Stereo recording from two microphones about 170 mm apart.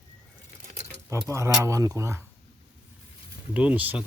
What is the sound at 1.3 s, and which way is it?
Speech, 15° right (ahead or behind).